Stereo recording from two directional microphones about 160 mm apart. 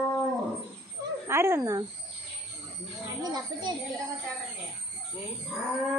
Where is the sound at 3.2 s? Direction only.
25° right (ahead or behind).